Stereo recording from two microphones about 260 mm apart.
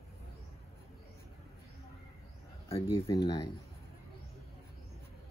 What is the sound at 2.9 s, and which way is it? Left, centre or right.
Speech, centre.